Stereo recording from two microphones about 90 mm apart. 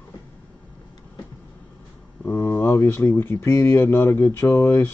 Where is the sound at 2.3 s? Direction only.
25° left (ahead or behind).